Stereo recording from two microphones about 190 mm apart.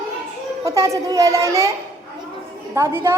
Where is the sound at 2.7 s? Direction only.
15° right (ahead or behind).